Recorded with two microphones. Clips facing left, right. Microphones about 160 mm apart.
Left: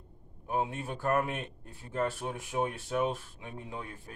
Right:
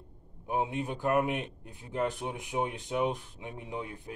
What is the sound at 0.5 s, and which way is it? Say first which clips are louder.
A man's voice: right 2 dB; 15° right (ahead or behind).